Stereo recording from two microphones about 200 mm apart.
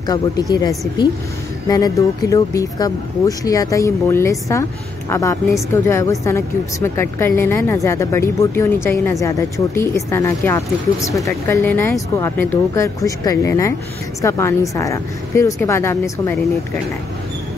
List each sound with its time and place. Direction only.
0.0 s a woman's voice: 20° left (ahead or behind)